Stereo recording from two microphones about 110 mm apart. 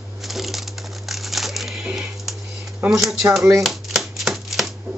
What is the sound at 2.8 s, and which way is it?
Speech, 20° right (ahead or behind).